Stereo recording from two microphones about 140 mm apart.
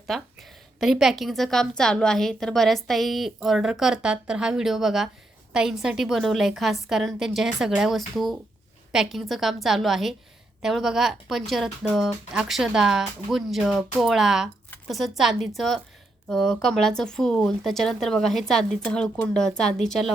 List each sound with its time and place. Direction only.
0.1 s a woman's voice: centre (ahead or behind)